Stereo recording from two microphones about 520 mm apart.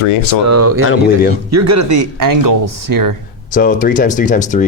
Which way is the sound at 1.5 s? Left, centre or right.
Right.